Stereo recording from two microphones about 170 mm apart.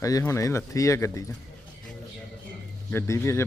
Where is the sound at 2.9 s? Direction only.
15° left (ahead or behind).